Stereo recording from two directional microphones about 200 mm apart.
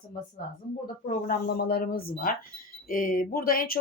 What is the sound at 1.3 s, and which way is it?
Speech, 55° left (ahead or behind).